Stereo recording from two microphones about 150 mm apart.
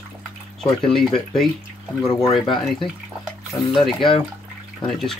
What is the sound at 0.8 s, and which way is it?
Speech, 5° left (ahead or behind).